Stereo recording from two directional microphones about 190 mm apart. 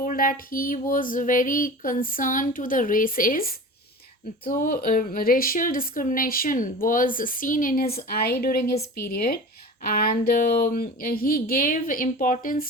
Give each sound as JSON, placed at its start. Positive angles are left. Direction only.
{"t": 0.0, "sound": "a woman's voice", "side_deg": 45}